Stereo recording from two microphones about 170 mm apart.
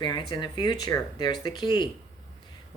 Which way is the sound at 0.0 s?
25° left (ahead or behind).